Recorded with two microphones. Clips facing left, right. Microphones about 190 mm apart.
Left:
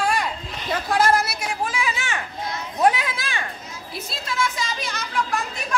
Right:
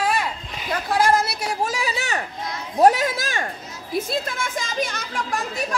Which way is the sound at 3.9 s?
50° right (ahead or behind).